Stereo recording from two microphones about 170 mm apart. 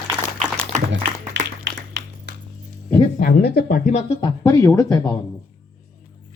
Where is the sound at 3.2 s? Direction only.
65° left (ahead or behind).